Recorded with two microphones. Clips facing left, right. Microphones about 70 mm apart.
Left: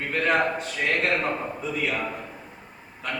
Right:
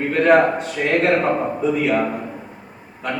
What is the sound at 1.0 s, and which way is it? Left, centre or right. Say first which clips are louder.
A man's voice: right 8 dB; right.